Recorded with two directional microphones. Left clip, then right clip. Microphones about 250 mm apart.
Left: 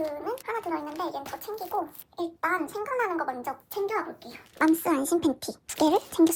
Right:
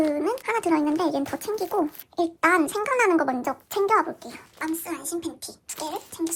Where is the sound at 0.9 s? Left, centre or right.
Right.